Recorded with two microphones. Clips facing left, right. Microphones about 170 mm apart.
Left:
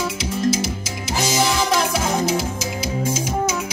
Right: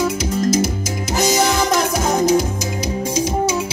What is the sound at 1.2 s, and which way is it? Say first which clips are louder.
Music: right 3 dB; 40° right (ahead or behind).